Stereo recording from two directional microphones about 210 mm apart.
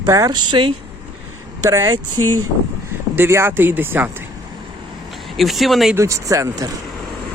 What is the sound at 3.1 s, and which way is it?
Speech, 10° right (ahead or behind).